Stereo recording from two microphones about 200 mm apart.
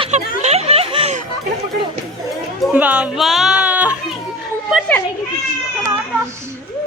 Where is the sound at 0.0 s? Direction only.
30° right (ahead or behind).